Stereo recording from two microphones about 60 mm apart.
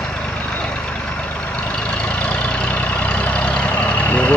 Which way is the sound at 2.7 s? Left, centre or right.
Left.